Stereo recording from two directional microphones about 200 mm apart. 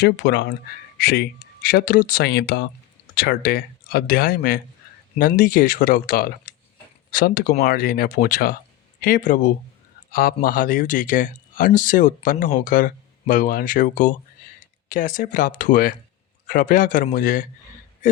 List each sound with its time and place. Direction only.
0.0 s speech: 55° left (ahead or behind)